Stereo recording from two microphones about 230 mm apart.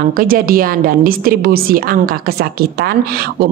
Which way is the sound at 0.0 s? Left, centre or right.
Right.